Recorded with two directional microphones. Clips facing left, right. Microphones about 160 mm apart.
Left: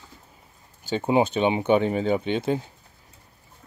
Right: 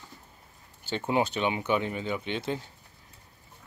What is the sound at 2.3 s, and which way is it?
Speech, 20° left (ahead or behind).